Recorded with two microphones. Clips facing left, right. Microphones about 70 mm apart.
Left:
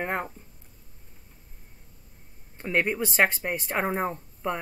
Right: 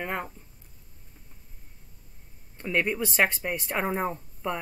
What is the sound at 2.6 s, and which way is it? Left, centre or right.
Speech, centre.